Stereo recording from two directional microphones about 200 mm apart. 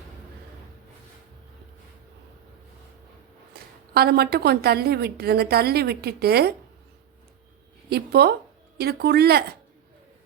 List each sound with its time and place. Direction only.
3.5 s a woman's voice: 50° right (ahead or behind)
7.9 s a woman's voice: 50° right (ahead or behind)